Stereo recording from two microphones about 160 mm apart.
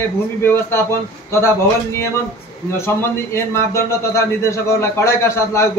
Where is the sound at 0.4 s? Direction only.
15° left (ahead or behind).